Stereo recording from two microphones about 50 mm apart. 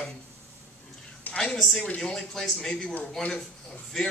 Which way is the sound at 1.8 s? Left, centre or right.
Centre.